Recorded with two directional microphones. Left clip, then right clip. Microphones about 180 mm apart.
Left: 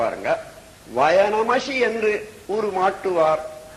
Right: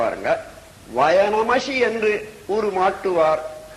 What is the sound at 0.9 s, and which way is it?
A man's voice, 35° right (ahead or behind).